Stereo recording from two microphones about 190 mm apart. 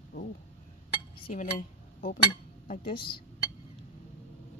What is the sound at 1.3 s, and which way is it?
Speech, 45° left (ahead or behind).